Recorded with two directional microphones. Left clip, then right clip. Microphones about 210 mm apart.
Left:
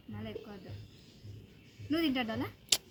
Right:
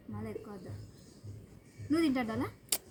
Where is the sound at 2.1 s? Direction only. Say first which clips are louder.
Even; 10° left (ahead or behind).